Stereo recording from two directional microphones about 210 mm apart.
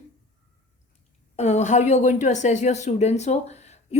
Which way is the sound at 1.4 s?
30° left (ahead or behind).